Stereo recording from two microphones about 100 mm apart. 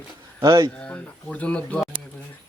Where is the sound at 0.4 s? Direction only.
45° right (ahead or behind).